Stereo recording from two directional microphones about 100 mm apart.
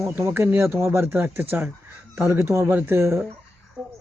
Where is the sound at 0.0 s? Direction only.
20° right (ahead or behind).